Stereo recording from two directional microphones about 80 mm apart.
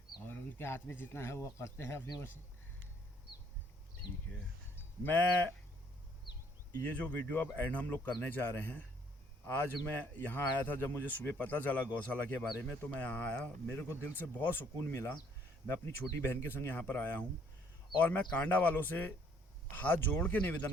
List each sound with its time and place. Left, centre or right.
0.3 s speech: left
5.0 s speech: left
6.8 s speech: left